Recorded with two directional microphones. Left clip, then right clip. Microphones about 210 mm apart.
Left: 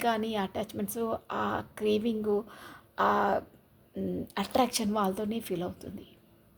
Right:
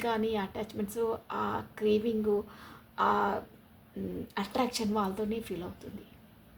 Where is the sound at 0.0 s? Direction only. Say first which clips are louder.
Left 2 dB; 50° left (ahead or behind).